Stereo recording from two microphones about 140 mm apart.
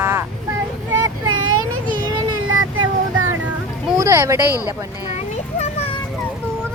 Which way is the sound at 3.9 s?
20° right (ahead or behind).